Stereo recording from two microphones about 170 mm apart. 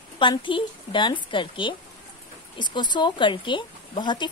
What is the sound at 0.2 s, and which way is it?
Speech, 30° left (ahead or behind).